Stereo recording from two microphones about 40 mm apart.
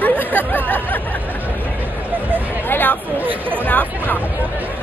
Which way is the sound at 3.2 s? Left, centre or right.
Right.